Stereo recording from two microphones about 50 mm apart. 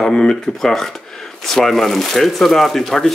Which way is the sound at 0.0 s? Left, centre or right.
Centre.